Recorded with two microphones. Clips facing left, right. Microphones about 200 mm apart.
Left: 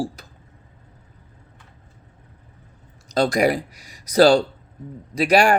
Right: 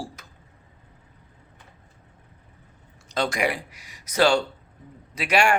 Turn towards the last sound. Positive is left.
turn(degrees=35)  # may be behind; listen again after turning